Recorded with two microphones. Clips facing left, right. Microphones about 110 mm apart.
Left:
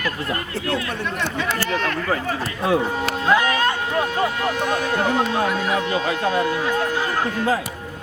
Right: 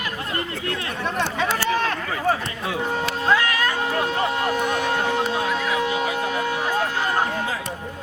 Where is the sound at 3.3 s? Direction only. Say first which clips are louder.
Left 3 dB; 20° left (ahead or behind).